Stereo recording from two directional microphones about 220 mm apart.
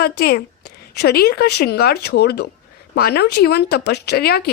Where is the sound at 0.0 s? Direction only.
45° left (ahead or behind).